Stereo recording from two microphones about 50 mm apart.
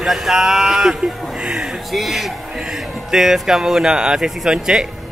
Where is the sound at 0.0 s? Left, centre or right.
Centre.